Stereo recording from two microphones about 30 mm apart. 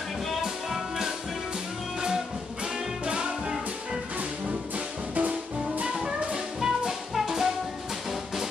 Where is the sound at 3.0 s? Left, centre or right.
Right.